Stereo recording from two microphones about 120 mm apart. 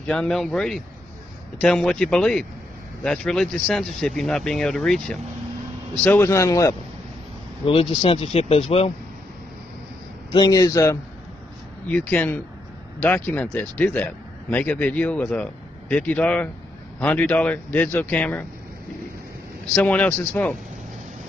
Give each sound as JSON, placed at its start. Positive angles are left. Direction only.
{"t": 0.0, "sound": "speech", "side_deg": 5}
{"t": 6.0, "sound": "a man's voice", "side_deg": 20}
{"t": 7.6, "sound": "speech", "side_deg": 50}
{"t": 10.3, "sound": "a man's voice", "side_deg": 30}
{"t": 11.9, "sound": "a man's voice", "side_deg": 15}
{"t": 19.7, "sound": "a man's voice", "side_deg": 10}